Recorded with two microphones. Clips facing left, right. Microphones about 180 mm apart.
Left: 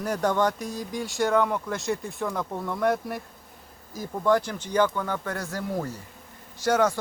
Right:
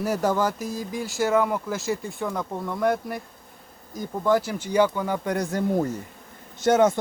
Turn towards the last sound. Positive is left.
turn(degrees=-20)  # may be behind; listen again after turning